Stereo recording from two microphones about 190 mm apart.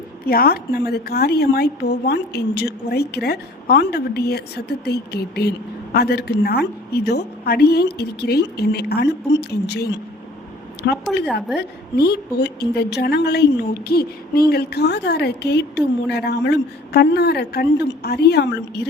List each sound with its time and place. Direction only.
0.3 s a woman's voice: 55° left (ahead or behind)
11.3 s a woman's voice: centre (ahead or behind)
11.9 s a woman's voice: 55° left (ahead or behind)